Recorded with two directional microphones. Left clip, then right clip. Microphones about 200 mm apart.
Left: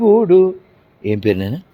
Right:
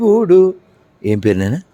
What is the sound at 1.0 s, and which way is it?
Speech, 30° right (ahead or behind).